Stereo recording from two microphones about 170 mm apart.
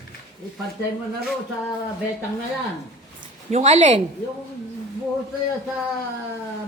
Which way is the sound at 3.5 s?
40° right (ahead or behind).